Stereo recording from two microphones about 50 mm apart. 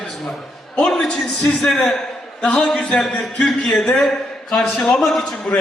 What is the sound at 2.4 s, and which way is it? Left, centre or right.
Speech, left.